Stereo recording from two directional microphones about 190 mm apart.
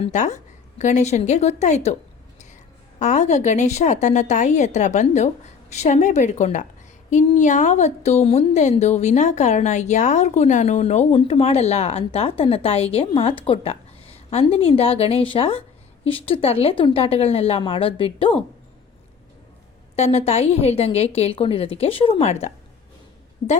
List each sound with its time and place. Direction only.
0.0 s speech: 35° left (ahead or behind)
3.0 s speech: 35° left (ahead or behind)
20.0 s speech: 35° left (ahead or behind)